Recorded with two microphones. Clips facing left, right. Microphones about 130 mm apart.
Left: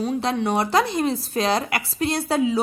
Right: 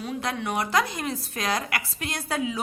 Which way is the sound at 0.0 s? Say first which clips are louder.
Left 7 dB; 30° left (ahead or behind).